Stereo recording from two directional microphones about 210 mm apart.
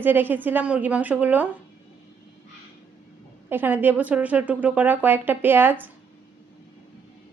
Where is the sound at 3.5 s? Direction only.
10° right (ahead or behind).